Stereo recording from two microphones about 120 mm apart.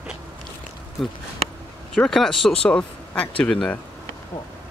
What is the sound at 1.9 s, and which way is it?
Speech, 5° left (ahead or behind).